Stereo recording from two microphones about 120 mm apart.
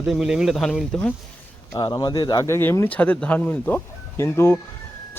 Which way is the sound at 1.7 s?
40° left (ahead or behind).